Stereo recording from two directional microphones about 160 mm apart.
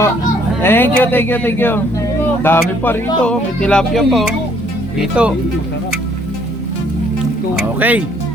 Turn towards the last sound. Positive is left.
turn(degrees=-10)  # may be behind; listen again after turning